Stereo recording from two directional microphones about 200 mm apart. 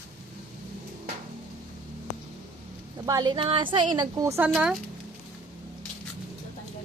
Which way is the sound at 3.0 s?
20° right (ahead or behind).